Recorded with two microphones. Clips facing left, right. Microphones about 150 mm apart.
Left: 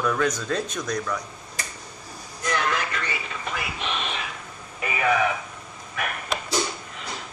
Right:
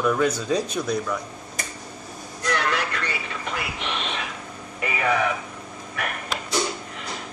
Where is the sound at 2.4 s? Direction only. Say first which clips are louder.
Right 1 dB; 65° right (ahead or behind).